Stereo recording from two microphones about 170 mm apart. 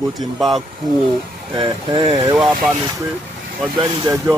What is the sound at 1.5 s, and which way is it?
Speech, 30° right (ahead or behind).